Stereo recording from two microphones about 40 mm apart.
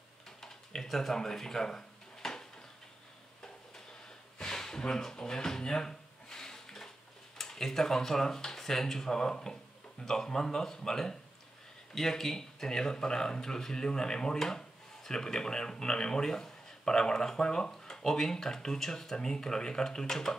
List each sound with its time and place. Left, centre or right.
0.8 s speech: centre
4.4 s a sound: centre
7.3 s speech: centre